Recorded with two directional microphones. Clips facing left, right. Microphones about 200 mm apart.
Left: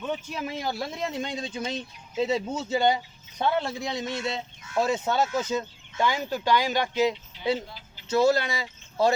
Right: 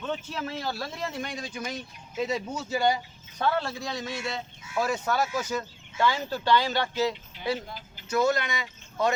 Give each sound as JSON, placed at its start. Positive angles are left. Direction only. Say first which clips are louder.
{"t": 0.0, "sound": "speech", "louder": "left 1 dB", "side_deg": 15}
{"t": 7.7, "sound": "a sound", "louder": "right 4 dB", "side_deg": -50}
{"t": 8.1, "sound": "speech", "louder": "left 3 dB", "side_deg": 30}